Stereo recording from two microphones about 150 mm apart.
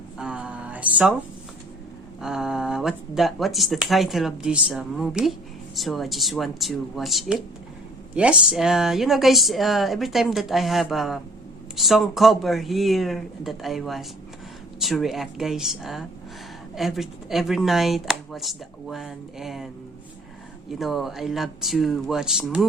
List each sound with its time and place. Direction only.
0.2 s a sound: 5° right (ahead or behind)
2.2 s speech: 5° right (ahead or behind)
20.7 s speech: centre (ahead or behind)